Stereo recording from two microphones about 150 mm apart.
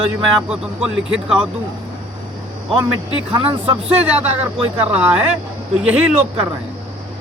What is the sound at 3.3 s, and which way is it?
Speech, 35° right (ahead or behind).